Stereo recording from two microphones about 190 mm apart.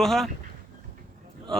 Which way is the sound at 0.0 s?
Centre (ahead or behind).